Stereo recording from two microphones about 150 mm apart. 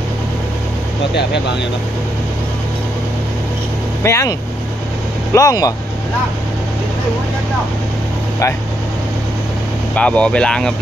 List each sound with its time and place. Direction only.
4.0 s speech: 20° left (ahead or behind)
9.9 s speech: 5° left (ahead or behind)